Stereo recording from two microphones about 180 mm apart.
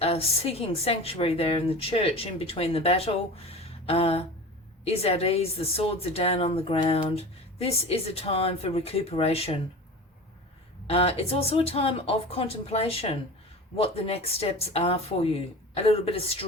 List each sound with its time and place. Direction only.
0.0 s speech: 35° left (ahead or behind)
10.8 s speech: 35° left (ahead or behind)